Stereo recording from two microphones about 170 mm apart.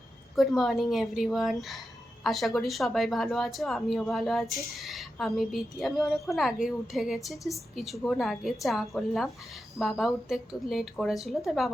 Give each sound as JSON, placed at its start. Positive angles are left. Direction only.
{"t": 0.3, "sound": "speech", "side_deg": 0}